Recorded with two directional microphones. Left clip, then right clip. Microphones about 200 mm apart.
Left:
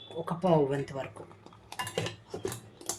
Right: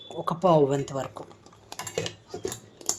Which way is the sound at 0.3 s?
30° right (ahead or behind).